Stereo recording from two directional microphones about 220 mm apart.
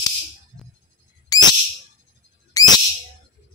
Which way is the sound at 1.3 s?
15° left (ahead or behind).